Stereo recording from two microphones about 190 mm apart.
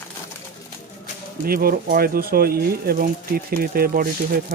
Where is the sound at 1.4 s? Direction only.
50° right (ahead or behind).